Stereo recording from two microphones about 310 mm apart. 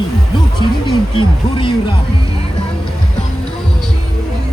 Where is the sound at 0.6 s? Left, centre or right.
Centre.